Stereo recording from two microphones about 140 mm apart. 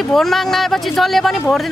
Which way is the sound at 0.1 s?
Centre (ahead or behind).